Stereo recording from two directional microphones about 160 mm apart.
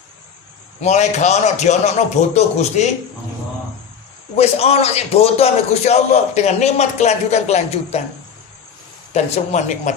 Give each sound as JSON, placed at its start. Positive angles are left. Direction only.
{"t": 0.8, "sound": "a man's voice", "side_deg": 45}
{"t": 4.4, "sound": "a man's voice", "side_deg": 40}
{"t": 9.1, "sound": "a man's voice", "side_deg": 45}